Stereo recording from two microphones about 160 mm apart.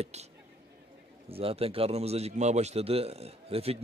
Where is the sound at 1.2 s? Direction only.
35° right (ahead or behind).